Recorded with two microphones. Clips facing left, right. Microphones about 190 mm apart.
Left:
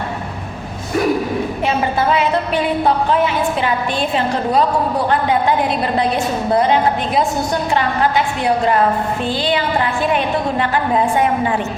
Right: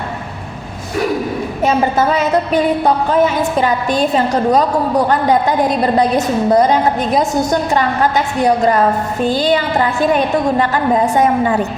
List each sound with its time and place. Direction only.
1.6 s a woman's voice: 40° right (ahead or behind)